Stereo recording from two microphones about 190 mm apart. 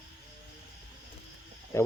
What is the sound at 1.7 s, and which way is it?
Speech, 15° left (ahead or behind).